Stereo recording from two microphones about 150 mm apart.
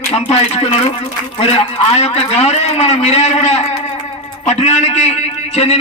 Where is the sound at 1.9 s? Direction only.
45° left (ahead or behind).